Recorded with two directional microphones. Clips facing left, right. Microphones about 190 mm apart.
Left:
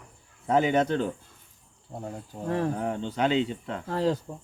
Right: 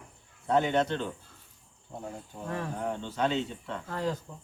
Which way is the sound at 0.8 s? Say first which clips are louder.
Left 6 dB; 40° left (ahead or behind).